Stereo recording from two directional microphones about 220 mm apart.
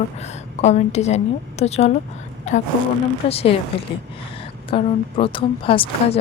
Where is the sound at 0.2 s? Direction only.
30° left (ahead or behind).